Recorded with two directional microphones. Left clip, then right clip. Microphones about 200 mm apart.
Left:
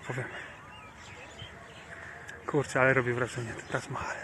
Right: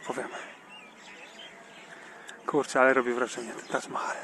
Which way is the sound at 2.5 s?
10° right (ahead or behind).